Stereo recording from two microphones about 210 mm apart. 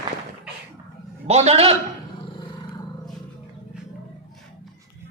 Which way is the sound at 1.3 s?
30° right (ahead or behind).